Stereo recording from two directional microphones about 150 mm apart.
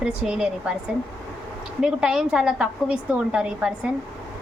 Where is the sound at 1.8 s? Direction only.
5° right (ahead or behind).